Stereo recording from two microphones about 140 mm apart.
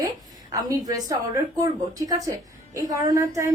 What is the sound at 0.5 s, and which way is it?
Speech, 25° right (ahead or behind).